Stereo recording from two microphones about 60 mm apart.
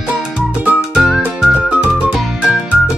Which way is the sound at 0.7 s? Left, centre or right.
Centre.